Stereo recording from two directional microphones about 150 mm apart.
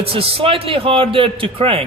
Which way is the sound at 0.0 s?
40° right (ahead or behind).